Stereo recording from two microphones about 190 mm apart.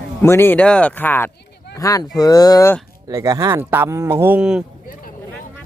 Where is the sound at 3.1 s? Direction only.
20° right (ahead or behind).